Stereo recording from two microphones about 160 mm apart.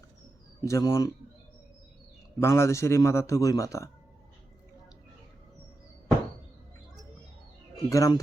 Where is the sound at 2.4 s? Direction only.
15° left (ahead or behind).